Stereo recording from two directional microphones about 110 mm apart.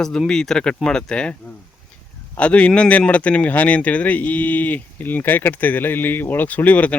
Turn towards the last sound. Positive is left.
turn(degrees=15)  # may be behind; listen again after turning